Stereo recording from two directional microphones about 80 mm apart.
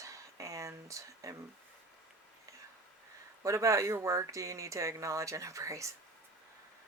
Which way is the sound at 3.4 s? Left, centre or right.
Right.